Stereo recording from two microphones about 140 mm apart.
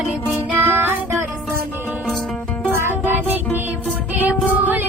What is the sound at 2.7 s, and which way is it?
Music, 15° right (ahead or behind).